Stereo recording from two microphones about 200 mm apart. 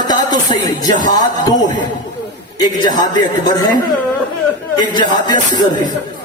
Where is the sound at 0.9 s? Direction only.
20° left (ahead or behind).